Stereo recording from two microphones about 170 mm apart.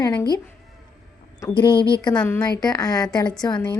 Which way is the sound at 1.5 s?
30° left (ahead or behind).